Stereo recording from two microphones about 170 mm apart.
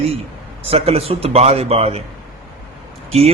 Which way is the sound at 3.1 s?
40° right (ahead or behind).